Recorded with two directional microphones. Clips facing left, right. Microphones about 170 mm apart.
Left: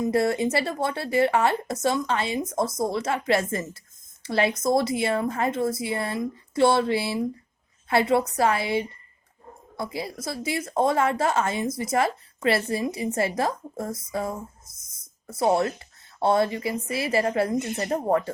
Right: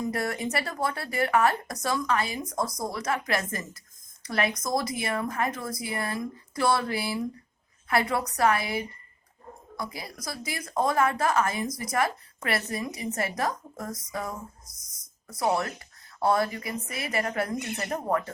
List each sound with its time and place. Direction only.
0.0 s speech: 25° left (ahead or behind)